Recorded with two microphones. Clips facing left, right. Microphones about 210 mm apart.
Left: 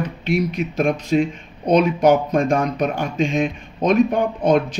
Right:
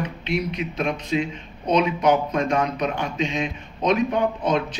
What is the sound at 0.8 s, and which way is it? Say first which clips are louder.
Speech: left 6 dB; 50° left (ahead or behind).